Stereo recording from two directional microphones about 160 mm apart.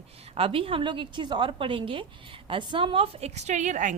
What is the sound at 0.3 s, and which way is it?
A woman's voice, 35° right (ahead or behind).